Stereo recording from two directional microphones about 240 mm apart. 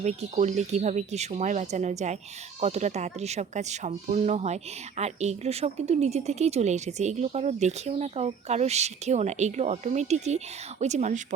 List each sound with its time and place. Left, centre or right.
0.0 s speech: right